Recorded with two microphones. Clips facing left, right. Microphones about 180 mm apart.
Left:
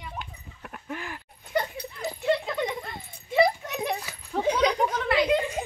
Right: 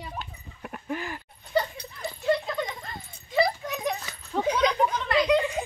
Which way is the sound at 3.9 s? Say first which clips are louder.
Even; 5° left (ahead or behind).